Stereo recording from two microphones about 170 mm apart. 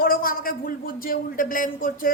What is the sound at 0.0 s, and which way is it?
A man's voice, 60° left (ahead or behind).